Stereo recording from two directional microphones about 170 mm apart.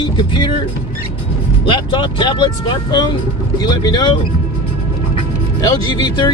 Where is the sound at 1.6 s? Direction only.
30° left (ahead or behind).